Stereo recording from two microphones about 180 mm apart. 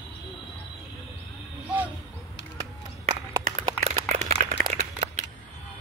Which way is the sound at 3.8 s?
40° right (ahead or behind).